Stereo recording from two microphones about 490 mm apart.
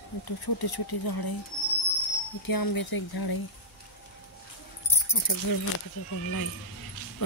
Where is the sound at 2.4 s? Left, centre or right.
Left.